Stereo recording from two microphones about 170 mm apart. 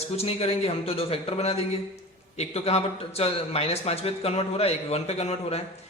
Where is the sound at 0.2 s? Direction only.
35° left (ahead or behind).